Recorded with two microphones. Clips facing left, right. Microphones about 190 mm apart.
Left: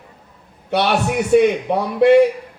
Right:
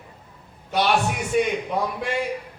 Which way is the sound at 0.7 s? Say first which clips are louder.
Left 4 dB; 65° left (ahead or behind).